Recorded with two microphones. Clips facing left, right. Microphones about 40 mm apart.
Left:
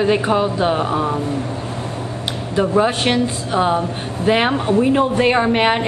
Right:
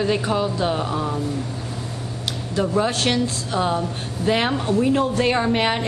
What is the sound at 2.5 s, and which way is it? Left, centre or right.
A woman's voice, left.